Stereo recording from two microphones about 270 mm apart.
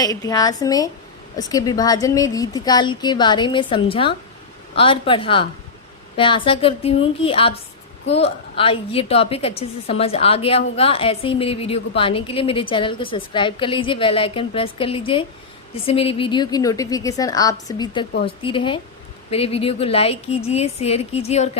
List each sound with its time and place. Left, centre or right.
0.0 s a woman's voice: centre